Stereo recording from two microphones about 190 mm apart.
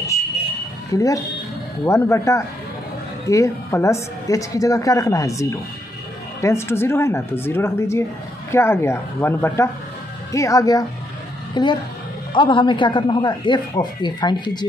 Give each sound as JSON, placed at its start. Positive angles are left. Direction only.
{"t": 0.9, "sound": "a woman's voice", "side_deg": 15}